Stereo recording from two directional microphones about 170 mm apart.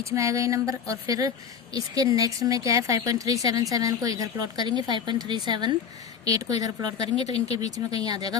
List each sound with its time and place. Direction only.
0.1 s speech: 20° right (ahead or behind)